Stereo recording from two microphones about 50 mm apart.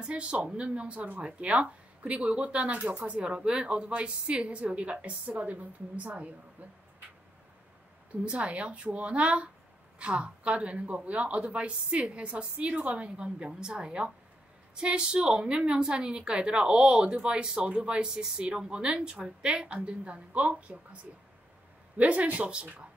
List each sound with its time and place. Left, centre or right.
0.0 s a woman's voice: right
8.3 s speech: right